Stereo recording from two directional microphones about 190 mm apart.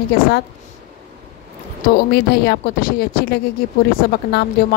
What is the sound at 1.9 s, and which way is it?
Speech, 55° left (ahead or behind).